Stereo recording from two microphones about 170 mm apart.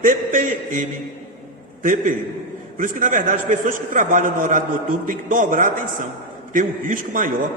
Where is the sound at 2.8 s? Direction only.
50° right (ahead or behind).